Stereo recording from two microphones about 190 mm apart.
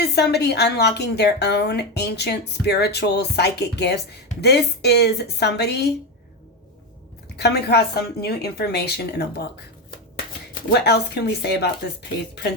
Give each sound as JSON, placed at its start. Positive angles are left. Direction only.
{"t": 0.1, "sound": "a woman's voice", "side_deg": 60}
{"t": 7.3, "sound": "a woman's voice", "side_deg": 60}
{"t": 10.5, "sound": "a woman's voice", "side_deg": 60}